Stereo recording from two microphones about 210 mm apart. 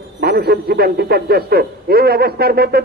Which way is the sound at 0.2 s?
50° right (ahead or behind).